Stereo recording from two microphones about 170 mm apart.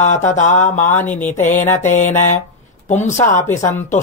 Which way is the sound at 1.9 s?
45° left (ahead or behind).